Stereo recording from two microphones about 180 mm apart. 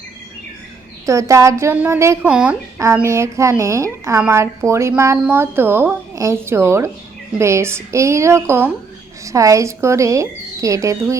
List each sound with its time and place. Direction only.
1.0 s a woman's voice: 15° right (ahead or behind)